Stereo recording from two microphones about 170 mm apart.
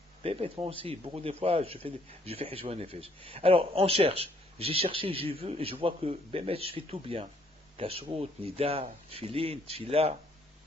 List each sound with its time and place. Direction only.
0.2 s speech: 35° right (ahead or behind)